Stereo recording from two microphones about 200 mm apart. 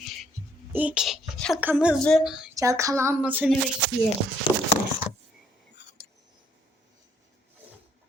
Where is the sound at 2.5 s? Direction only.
15° right (ahead or behind).